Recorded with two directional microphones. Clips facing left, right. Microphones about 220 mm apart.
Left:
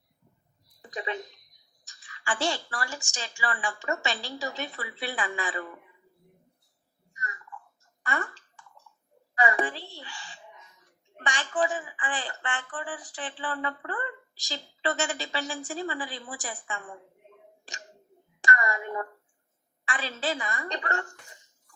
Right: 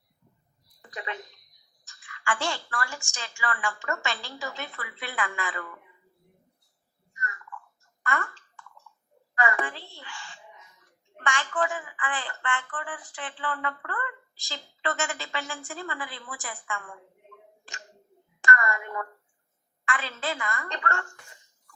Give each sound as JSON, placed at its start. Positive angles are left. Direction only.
{"t": 0.8, "sound": "a woman's voice", "side_deg": 20}
{"t": 4.8, "sound": "a woman's voice", "side_deg": 30}
{"t": 5.1, "sound": "speech", "side_deg": 20}
{"t": 7.2, "sound": "a sound", "side_deg": 20}
{"t": 8.0, "sound": "speech", "side_deg": 20}
{"t": 9.4, "sound": "a woman's voice", "side_deg": 20}
{"t": 18.4, "sound": "speech", "side_deg": 20}